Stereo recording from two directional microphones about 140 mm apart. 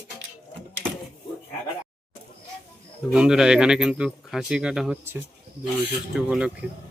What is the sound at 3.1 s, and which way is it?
Speech, 5° right (ahead or behind).